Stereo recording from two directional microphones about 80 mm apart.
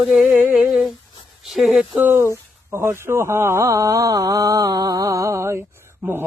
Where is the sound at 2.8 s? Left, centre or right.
Right.